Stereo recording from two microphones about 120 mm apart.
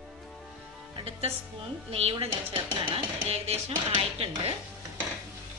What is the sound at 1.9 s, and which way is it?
Speech, 55° right (ahead or behind).